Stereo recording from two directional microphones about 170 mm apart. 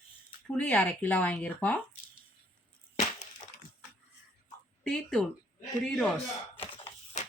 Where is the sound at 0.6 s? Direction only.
10° left (ahead or behind).